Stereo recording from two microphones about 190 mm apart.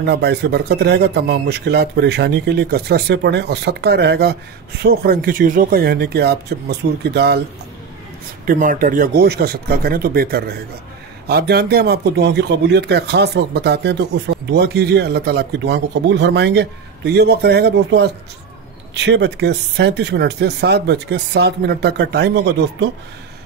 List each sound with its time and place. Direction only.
0.0 s a man's voice: 60° right (ahead or behind)
8.5 s a man's voice: 45° right (ahead or behind)